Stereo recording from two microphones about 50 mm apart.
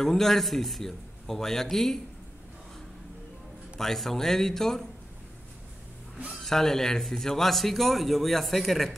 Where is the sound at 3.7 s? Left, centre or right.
Centre.